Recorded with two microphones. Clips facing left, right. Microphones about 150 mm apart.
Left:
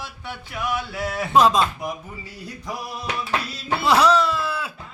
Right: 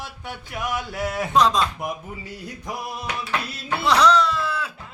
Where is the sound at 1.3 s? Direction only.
5° left (ahead or behind).